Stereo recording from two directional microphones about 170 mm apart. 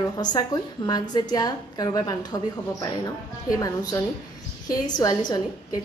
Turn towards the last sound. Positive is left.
turn(degrees=25)  # may be behind; listen again after turning